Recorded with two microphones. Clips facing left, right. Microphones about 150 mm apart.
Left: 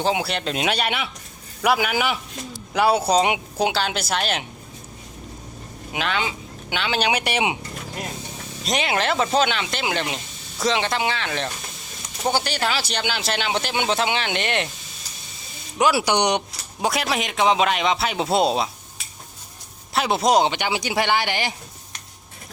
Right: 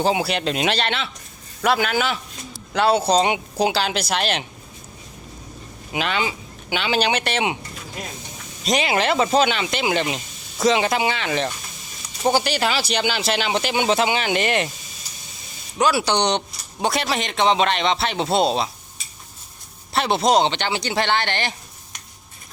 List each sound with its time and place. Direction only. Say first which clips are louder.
0.0 s speech: right 2 dB; 5° right (ahead or behind)
5.9 s speech: right 2 dB; centre (ahead or behind)
7.1 s speech: even; 15° left (ahead or behind)
8.6 s speech: right 3 dB; centre (ahead or behind)
15.8 s speech: even; 15° left (ahead or behind)
16.8 s speech: right 1 dB; 5° left (ahead or behind)
19.9 s speech: right 1 dB; 5° left (ahead or behind)